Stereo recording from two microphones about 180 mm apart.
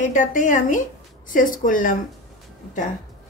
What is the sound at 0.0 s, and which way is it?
Speech, 45° left (ahead or behind).